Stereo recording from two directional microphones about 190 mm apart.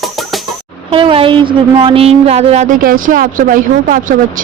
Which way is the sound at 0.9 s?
30° right (ahead or behind).